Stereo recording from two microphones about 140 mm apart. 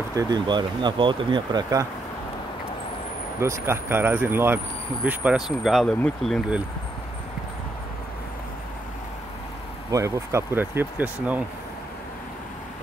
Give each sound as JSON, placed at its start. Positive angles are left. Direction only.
{"t": 0.1, "sound": "speech", "side_deg": -25}
{"t": 3.3, "sound": "speech", "side_deg": -20}
{"t": 9.8, "sound": "speech", "side_deg": -25}